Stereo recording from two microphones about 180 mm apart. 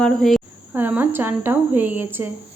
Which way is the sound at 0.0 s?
Centre (ahead or behind).